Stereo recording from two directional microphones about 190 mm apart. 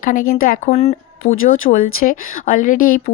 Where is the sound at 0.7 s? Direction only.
35° left (ahead or behind).